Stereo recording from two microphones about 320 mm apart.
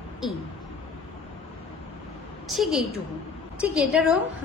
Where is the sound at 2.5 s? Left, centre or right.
Centre.